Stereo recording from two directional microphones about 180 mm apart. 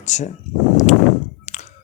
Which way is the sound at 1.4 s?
40° left (ahead or behind).